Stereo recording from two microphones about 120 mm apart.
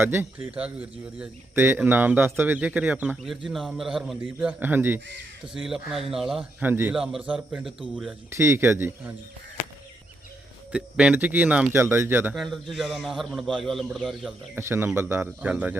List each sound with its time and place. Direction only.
0.0 s speech: 15° right (ahead or behind)
5.5 s a man's voice: 5° right (ahead or behind)
6.6 s speech: 15° right (ahead or behind)
8.3 s speech: 20° right (ahead or behind)
10.7 s speech: 10° right (ahead or behind)
12.4 s a man's voice: centre (ahead or behind)
14.5 s speech: 20° right (ahead or behind)